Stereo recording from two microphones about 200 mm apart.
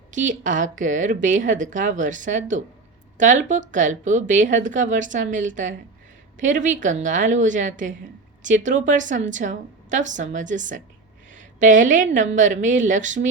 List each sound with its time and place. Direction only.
0.1 s speech: 40° right (ahead or behind)